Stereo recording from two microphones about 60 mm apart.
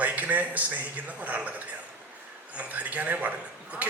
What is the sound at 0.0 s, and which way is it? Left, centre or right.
A man's voice, right.